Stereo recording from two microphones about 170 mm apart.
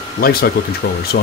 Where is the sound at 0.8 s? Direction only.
70° left (ahead or behind).